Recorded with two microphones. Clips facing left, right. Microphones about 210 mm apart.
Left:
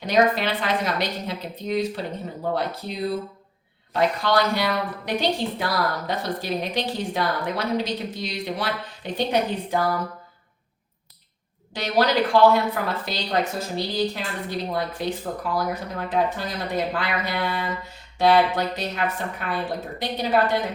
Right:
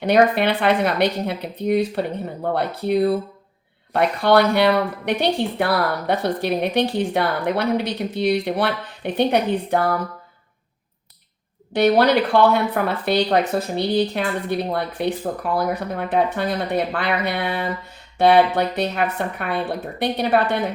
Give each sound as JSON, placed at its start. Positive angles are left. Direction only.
{"t": 0.0, "sound": "a woman's voice", "side_deg": -60}
{"t": 11.7, "sound": "a woman's voice", "side_deg": -60}